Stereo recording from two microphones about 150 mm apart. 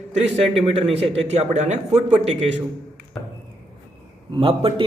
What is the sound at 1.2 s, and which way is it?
Speech, 45° right (ahead or behind).